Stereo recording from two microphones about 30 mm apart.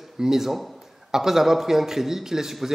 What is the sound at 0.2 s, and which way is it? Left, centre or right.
A man's voice, centre.